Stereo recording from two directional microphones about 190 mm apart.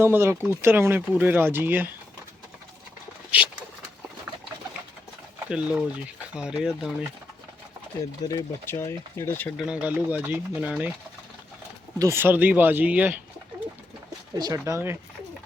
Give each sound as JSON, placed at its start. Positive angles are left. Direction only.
{"t": 0.0, "sound": "speech", "side_deg": -15}
{"t": 4.3, "sound": "rodents", "side_deg": -10}
{"t": 5.5, "sound": "speech", "side_deg": -5}
{"t": 8.2, "sound": "speech", "side_deg": 15}
{"t": 9.6, "sound": "speech", "side_deg": -5}
{"t": 11.9, "sound": "speech", "side_deg": -15}
{"t": 14.3, "sound": "speech", "side_deg": -20}